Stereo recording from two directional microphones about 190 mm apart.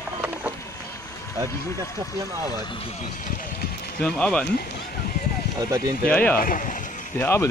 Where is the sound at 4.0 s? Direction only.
5° left (ahead or behind).